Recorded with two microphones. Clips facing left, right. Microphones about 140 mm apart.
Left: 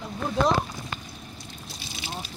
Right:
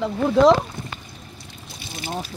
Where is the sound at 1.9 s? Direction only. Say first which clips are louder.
Right 8 dB; 50° right (ahead or behind).